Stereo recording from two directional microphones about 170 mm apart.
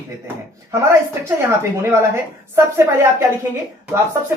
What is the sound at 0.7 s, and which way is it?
Speech, 15° right (ahead or behind).